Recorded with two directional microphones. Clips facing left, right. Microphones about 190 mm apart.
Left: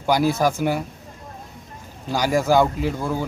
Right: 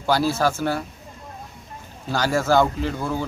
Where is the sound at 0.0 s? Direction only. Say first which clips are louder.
Left 1 dB; 15° left (ahead or behind).